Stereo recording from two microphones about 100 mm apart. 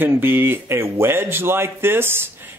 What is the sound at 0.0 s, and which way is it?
Speech, 20° right (ahead or behind).